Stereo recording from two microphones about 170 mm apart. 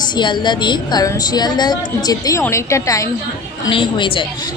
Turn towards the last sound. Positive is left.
turn(degrees=30)  # may be behind; listen again after turning